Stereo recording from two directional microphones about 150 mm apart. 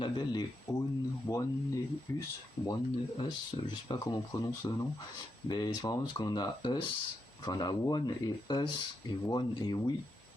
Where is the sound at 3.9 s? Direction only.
25° left (ahead or behind).